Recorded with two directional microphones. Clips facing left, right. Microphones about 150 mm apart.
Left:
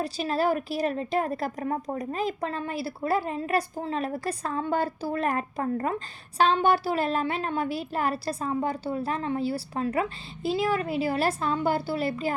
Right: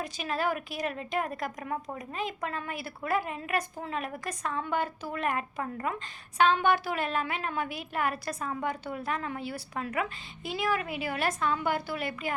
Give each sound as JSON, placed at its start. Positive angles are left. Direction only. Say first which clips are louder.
{"t": 0.0, "sound": "a woman's voice", "louder": "left 5 dB", "side_deg": 35}